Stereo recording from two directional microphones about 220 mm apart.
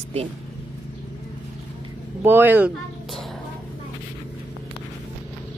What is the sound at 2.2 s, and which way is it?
Speech, 10° right (ahead or behind).